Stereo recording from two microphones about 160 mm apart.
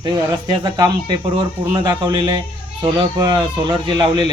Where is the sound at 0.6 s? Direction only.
25° right (ahead or behind).